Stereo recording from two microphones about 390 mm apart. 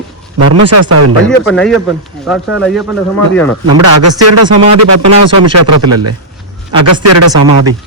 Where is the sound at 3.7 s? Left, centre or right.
Right.